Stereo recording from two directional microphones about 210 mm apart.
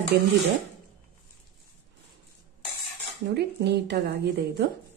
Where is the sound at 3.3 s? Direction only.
50° right (ahead or behind).